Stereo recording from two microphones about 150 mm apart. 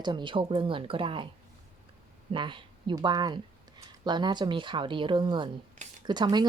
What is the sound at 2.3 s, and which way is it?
A woman's voice, 35° right (ahead or behind).